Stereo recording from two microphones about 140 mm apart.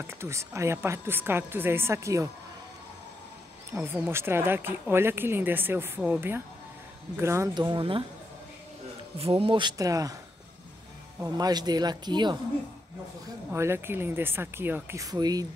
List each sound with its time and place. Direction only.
0.0 s speech: 20° right (ahead or behind)
3.7 s speech: 15° right (ahead or behind)
7.5 s speech: 35° right (ahead or behind)
9.2 s speech: 40° right (ahead or behind); by 10.1 s 25° right (ahead or behind)
11.3 s speech: 30° right (ahead or behind)
13.5 s speech: 15° right (ahead or behind)